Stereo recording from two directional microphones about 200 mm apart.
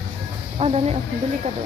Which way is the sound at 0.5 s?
30° right (ahead or behind).